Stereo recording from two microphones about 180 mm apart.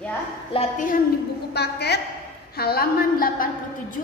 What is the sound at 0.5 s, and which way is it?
Speech, 45° left (ahead or behind).